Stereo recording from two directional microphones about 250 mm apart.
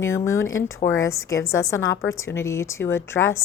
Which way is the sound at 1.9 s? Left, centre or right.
Left.